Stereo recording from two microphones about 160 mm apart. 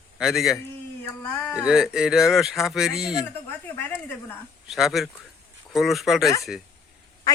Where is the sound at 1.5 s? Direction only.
5° right (ahead or behind).